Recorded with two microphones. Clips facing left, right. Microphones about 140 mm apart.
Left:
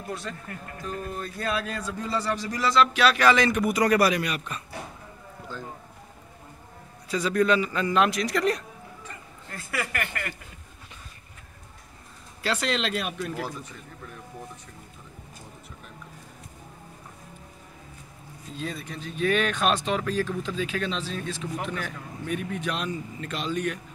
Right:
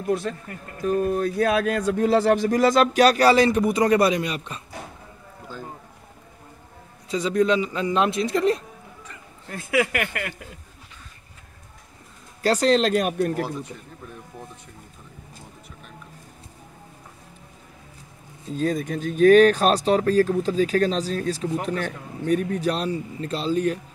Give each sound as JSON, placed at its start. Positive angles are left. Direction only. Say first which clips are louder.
{"t": 0.3, "sound": "speech", "louder": "right 5 dB", "side_deg": -50}
{"t": 7.1, "sound": "a man's voice", "louder": "right 2 dB", "side_deg": -25}
{"t": 9.5, "sound": "speech", "louder": "right 9 dB", "side_deg": -60}
{"t": 12.4, "sound": "speech", "louder": "right 9 dB", "side_deg": -40}
{"t": 18.6, "sound": "speech", "louder": "right 11 dB", "side_deg": -45}